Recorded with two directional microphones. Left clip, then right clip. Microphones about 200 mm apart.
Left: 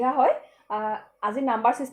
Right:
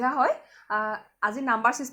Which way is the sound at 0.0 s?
40° right (ahead or behind).